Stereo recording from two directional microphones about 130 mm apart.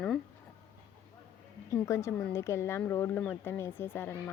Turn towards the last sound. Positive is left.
turn(degrees=15)  # may be behind; listen again after turning